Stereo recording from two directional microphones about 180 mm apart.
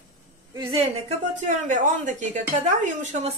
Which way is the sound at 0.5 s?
35° right (ahead or behind).